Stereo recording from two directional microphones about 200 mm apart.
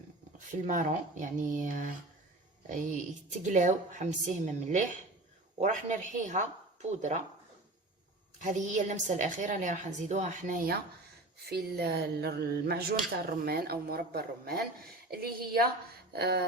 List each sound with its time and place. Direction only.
0.7 s a woman's voice: 40° right (ahead or behind)
8.4 s a woman's voice: 40° right (ahead or behind)
11.4 s speech: 55° right (ahead or behind)